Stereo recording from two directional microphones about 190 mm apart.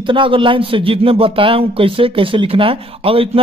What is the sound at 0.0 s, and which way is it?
Speech, 25° right (ahead or behind).